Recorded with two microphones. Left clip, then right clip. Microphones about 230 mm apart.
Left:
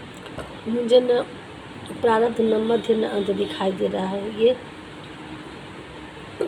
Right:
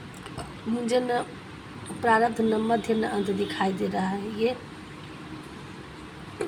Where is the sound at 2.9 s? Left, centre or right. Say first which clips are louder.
Left 5 dB; right.